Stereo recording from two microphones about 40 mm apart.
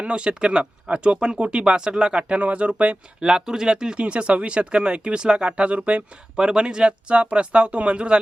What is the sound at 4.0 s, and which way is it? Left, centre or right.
Speech, right.